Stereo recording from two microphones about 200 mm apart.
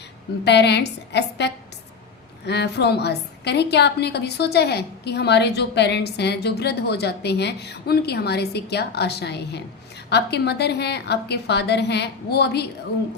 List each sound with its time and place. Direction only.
0.4 s a woman's voice: 55° left (ahead or behind)